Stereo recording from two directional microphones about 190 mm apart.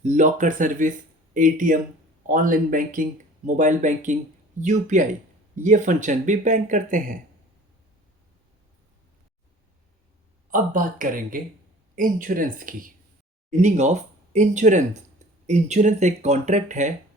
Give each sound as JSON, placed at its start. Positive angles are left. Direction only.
{"t": 0.0, "sound": "speech", "side_deg": -40}
{"t": 10.5, "sound": "speech", "side_deg": -45}